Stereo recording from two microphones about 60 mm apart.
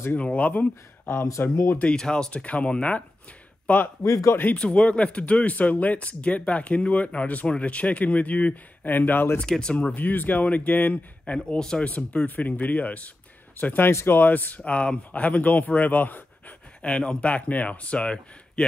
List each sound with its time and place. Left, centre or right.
0.1 s speech: left
1.5 s speech: left
1.8 s speech: centre
4.0 s speech: left
4.6 s speech: centre; by 9.4 s left
9.4 s speech: centre
11.3 s speech: centre; by 13.8 s left
13.8 s speech: left
14.6 s speech: centre
16.8 s speech: centre